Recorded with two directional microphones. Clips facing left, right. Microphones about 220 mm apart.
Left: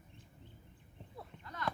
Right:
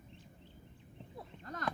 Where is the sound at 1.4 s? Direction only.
45° right (ahead or behind).